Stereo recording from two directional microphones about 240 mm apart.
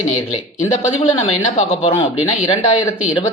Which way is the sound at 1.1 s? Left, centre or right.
Left.